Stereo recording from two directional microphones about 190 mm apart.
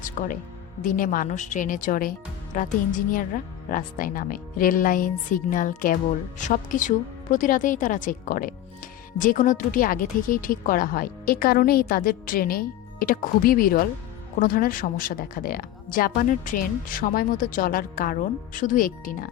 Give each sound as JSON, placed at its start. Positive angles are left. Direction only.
{"t": 0.0, "sound": "speech", "side_deg": 45}